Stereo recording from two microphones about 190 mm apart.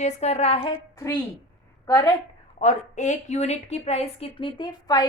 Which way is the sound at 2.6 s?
40° left (ahead or behind).